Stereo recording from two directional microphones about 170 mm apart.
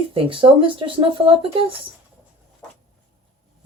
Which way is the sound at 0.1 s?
30° right (ahead or behind).